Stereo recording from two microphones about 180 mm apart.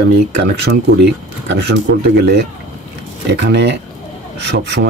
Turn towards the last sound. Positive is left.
turn(degrees=-75)  # may be behind; listen again after turning